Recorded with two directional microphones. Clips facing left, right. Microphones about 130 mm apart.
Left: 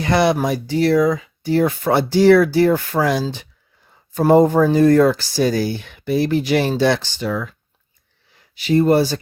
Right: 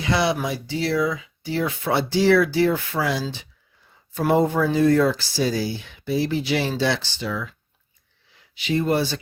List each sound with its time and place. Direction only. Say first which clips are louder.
0.0 s speech: left 6 dB; 55° left (ahead or behind)
8.5 s speech: left 7 dB; 40° left (ahead or behind)